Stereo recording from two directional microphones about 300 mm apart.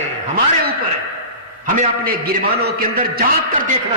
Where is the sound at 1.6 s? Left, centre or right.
Right.